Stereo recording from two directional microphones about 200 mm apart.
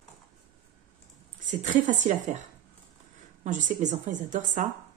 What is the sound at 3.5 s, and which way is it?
A woman's voice, 40° right (ahead or behind).